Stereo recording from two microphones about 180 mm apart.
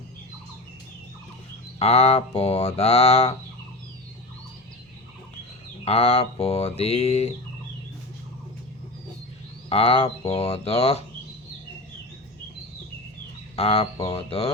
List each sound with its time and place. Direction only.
1.8 s speech: 35° left (ahead or behind)
5.8 s speech: 35° left (ahead or behind)
9.6 s speech: 35° left (ahead or behind)
13.6 s speech: 35° left (ahead or behind)